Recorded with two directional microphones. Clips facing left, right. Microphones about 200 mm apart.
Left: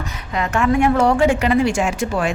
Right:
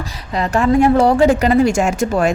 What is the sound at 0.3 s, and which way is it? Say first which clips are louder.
Speech: right 4 dB; 35° right (ahead or behind).